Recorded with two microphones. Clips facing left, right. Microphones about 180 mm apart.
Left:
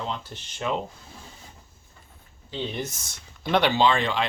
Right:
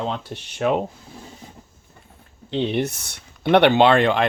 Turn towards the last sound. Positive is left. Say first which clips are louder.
# right 7 dB
turn(degrees=-55)  # may be behind; listen again after turning